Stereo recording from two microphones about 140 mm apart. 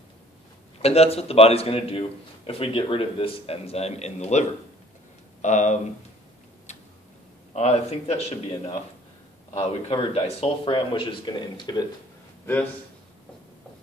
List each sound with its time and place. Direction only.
0.8 s a man's voice: 45° left (ahead or behind)
6.7 s tick-tock: 55° left (ahead or behind)
7.5 s a man's voice: 50° left (ahead or behind); by 11.8 s 30° left (ahead or behind)